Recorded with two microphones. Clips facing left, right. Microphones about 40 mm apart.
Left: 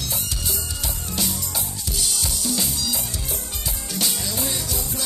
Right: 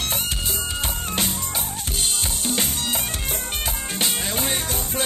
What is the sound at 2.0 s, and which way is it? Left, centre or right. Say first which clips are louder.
Music: even; right.